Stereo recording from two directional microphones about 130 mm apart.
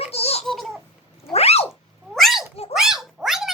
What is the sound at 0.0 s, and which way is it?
Baby laughter, 50° left (ahead or behind).